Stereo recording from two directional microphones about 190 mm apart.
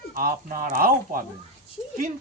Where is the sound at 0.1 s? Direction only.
50° right (ahead or behind).